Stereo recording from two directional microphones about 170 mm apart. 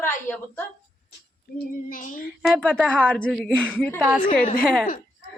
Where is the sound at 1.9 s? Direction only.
55° left (ahead or behind).